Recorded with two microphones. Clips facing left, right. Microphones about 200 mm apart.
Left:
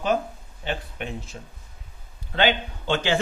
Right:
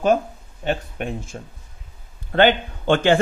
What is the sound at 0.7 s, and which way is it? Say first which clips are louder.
A man's voice: right 6 dB; 45° right (ahead or behind).